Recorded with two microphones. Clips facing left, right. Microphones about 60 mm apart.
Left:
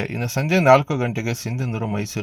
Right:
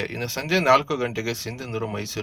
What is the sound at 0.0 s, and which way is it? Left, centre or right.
Speech, left.